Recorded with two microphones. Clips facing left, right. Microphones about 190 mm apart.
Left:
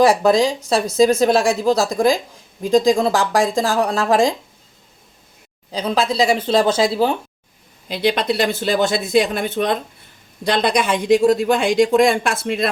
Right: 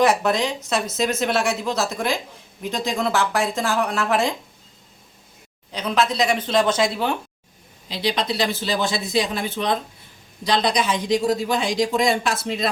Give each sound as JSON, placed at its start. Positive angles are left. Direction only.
{"t": 0.2, "sound": "a woman's voice", "side_deg": 35}
{"t": 5.7, "sound": "a woman's voice", "side_deg": 30}
{"t": 7.9, "sound": "speech", "side_deg": 55}